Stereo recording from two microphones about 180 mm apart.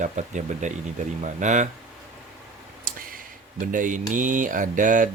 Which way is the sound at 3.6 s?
45° right (ahead or behind).